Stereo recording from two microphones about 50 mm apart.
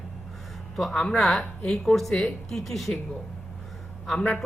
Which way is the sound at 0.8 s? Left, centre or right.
Centre.